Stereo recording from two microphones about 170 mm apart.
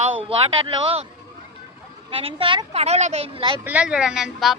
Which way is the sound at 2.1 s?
35° right (ahead or behind).